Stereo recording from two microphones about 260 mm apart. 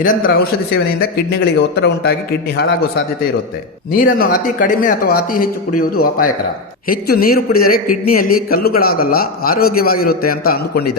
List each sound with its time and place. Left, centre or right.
0.0 s a man's voice: left
4.0 s a man's voice: left